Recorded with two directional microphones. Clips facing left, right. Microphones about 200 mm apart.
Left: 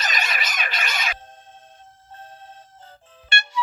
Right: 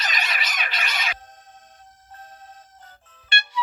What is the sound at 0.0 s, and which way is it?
Music, 45° left (ahead or behind).